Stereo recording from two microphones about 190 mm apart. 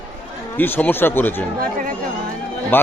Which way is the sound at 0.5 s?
10° left (ahead or behind).